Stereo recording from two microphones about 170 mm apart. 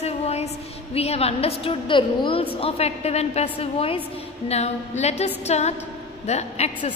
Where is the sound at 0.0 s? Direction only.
40° left (ahead or behind).